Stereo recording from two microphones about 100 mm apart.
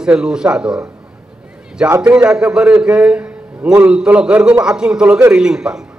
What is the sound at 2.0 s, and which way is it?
A man's voice, 10° right (ahead or behind).